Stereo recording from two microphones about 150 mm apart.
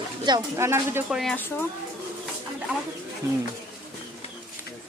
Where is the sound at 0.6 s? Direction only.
15° right (ahead or behind).